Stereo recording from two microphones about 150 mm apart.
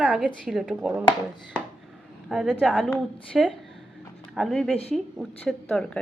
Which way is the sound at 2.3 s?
5° right (ahead or behind).